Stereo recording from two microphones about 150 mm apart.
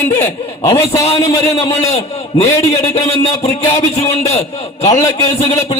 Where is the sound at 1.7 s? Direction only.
40° left (ahead or behind).